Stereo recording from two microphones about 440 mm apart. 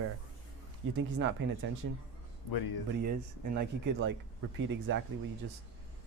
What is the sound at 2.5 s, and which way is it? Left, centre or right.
Speech, left.